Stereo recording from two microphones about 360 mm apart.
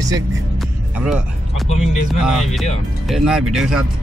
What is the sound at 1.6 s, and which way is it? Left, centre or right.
Speech, centre.